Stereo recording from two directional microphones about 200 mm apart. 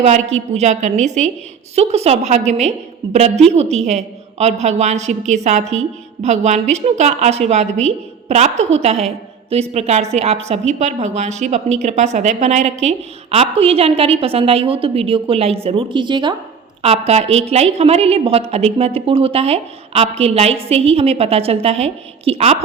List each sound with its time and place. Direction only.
0.0 s a woman's voice: 35° right (ahead or behind)
17.1 s a woman's voice: 35° right (ahead or behind)